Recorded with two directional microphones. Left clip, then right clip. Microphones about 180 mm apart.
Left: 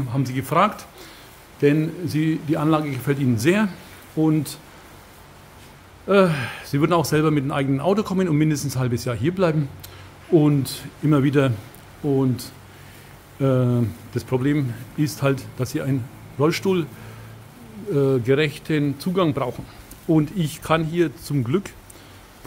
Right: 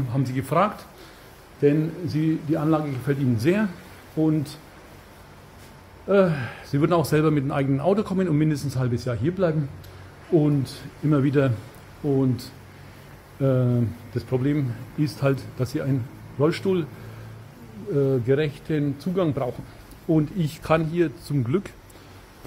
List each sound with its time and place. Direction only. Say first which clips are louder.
0.1 s speech: left 2 dB; 10° left (ahead or behind)
6.0 s speech: left 2 dB; 15° left (ahead or behind)
17.9 s speech: left 3 dB; 20° left (ahead or behind)